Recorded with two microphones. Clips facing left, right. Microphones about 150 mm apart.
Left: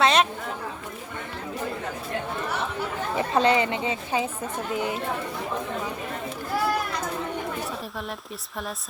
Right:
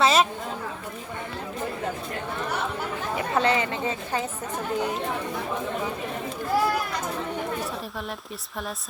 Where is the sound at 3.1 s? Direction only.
25° left (ahead or behind).